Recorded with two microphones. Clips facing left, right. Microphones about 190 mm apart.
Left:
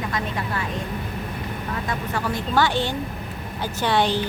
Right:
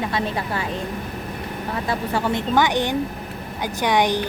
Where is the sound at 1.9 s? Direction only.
30° right (ahead or behind).